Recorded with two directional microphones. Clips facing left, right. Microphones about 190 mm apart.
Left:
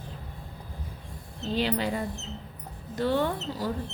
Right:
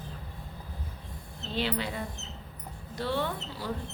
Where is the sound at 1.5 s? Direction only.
40° left (ahead or behind).